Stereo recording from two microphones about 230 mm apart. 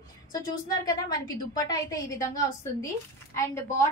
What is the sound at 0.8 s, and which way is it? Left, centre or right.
A woman's voice, centre.